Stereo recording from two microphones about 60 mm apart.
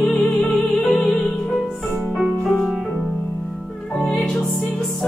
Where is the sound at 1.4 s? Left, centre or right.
Centre.